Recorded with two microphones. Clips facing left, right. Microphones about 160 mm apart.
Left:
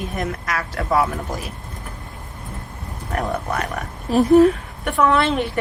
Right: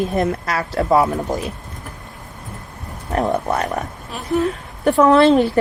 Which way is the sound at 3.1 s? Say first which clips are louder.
Right 5 dB; 30° right (ahead or behind).